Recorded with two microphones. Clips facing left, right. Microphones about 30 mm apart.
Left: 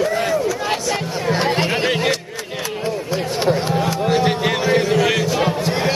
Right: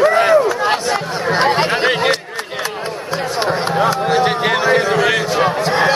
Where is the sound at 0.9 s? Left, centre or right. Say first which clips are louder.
Right 3 dB; right.